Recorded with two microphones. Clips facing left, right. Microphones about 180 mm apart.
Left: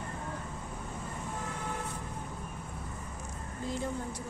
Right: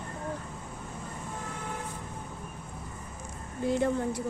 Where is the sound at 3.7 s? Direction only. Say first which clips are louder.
Right 9 dB; 65° right (ahead or behind).